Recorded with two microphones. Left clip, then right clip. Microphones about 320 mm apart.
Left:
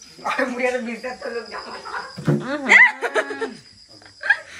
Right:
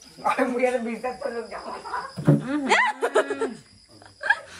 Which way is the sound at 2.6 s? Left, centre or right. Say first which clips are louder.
Left 9 dB; centre.